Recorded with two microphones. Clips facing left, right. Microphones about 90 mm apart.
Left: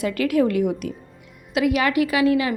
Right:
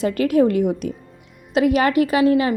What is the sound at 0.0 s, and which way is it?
A woman's voice, 30° right (ahead or behind).